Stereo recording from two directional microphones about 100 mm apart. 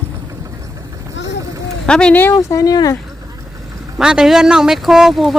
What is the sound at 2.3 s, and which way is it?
Speech, 35° left (ahead or behind).